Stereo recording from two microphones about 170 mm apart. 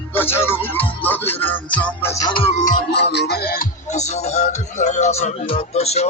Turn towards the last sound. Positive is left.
turn(degrees=40)  # may be behind; listen again after turning